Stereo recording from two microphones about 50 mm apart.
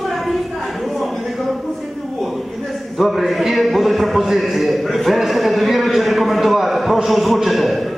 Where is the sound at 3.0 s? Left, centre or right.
Centre.